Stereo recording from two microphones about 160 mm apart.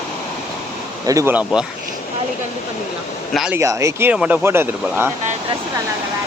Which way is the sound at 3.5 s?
15° right (ahead or behind).